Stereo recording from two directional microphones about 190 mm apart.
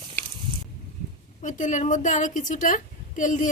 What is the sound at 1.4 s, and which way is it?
A woman's voice, 40° left (ahead or behind).